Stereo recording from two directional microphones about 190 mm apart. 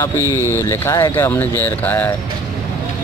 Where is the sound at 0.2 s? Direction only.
15° right (ahead or behind).